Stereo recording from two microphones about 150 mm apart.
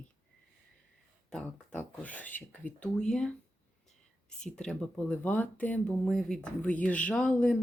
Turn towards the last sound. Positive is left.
turn(degrees=5)  # may be behind; listen again after turning